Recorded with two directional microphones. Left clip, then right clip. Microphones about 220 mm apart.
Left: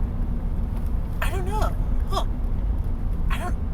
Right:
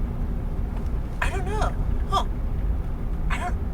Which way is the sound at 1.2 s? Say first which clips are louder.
Right 1 dB; 30° right (ahead or behind).